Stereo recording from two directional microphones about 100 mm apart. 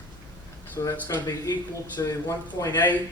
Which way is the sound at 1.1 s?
40° left (ahead or behind).